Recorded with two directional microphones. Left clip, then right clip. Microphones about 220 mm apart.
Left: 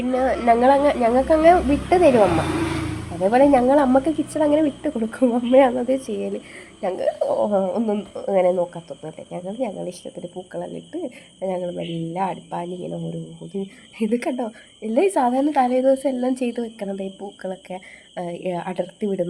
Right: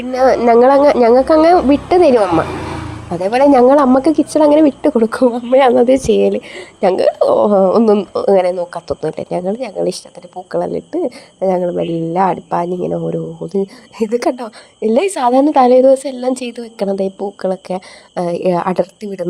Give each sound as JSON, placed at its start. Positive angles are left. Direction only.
{"t": 0.1, "sound": "a woman's voice", "side_deg": -30}
{"t": 3.2, "sound": "a woman's voice", "side_deg": -35}